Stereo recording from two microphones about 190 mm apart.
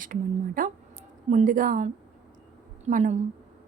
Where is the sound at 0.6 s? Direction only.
45° right (ahead or behind).